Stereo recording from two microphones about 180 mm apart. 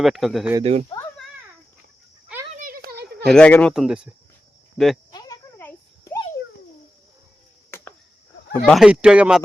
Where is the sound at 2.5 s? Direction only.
50° right (ahead or behind).